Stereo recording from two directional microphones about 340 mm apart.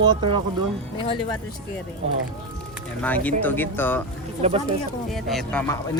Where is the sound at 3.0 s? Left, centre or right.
Centre.